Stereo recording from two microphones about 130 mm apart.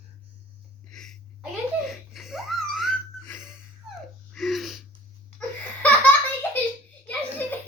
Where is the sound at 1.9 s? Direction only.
Centre (ahead or behind).